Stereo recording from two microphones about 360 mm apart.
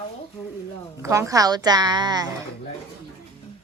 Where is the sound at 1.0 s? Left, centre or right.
Centre.